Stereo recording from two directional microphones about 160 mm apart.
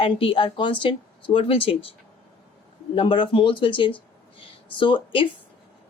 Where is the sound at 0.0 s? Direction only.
35° left (ahead or behind).